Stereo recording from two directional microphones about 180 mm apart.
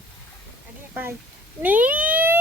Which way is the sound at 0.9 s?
10° right (ahead or behind).